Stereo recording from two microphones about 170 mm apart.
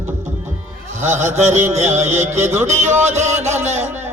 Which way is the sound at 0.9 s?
45° right (ahead or behind).